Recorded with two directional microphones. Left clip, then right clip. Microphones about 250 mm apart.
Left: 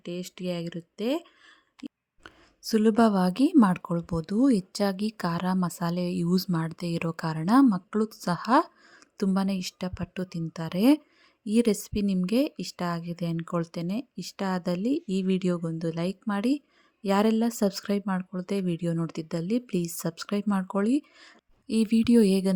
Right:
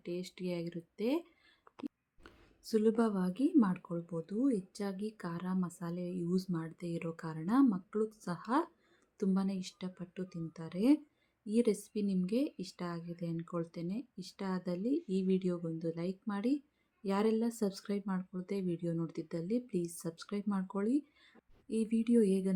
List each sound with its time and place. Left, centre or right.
0.0 s speech: left